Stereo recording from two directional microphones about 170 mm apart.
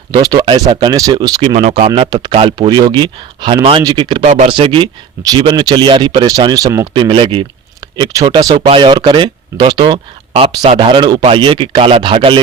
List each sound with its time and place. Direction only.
0.1 s speech: 25° right (ahead or behind)
1.5 s speech: 35° right (ahead or behind)
4.2 s speech: 45° right (ahead or behind)
4.4 s speech: 30° right (ahead or behind)